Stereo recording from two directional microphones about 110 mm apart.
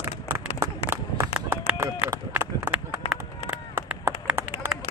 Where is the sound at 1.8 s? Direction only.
25° right (ahead or behind).